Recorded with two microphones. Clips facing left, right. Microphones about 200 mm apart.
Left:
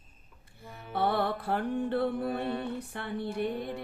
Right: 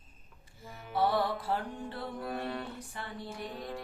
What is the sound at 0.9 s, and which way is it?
Music, 60° left (ahead or behind).